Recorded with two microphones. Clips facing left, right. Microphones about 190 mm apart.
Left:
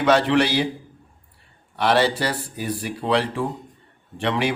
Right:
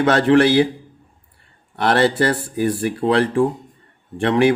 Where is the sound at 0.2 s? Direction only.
50° right (ahead or behind).